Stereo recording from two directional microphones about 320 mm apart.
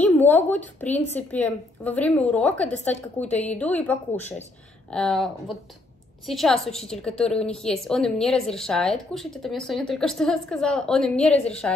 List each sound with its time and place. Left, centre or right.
0.0 s a sound: centre
0.5 s a woman's voice: centre
4.2 s speech: left
4.9 s a woman's voice: centre